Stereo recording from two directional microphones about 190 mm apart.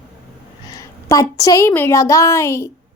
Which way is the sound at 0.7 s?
15° left (ahead or behind).